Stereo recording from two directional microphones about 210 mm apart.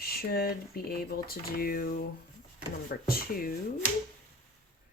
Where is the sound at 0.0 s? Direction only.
45° left (ahead or behind).